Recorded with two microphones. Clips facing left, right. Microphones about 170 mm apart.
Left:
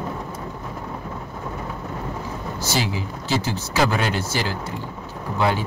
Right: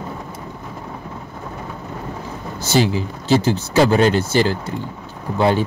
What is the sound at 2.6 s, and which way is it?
Speech, 55° right (ahead or behind).